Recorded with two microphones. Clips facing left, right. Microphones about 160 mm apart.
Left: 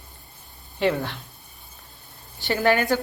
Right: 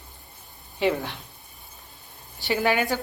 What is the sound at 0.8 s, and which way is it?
Speech, 10° right (ahead or behind).